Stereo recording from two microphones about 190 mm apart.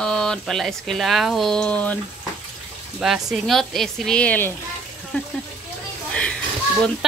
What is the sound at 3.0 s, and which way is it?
Speech, centre (ahead or behind).